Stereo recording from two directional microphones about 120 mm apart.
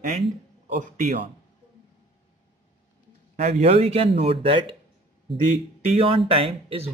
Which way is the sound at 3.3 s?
65° right (ahead or behind).